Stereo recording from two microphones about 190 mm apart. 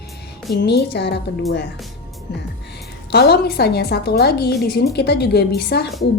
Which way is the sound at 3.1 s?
60° left (ahead or behind).